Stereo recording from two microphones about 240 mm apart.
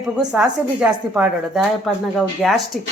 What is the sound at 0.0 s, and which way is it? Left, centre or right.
Speech, centre.